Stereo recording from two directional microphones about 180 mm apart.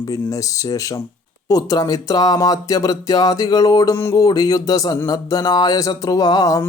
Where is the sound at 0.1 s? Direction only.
20° left (ahead or behind).